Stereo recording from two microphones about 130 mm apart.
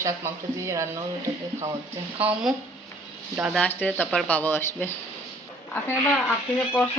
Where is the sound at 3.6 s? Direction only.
10° left (ahead or behind).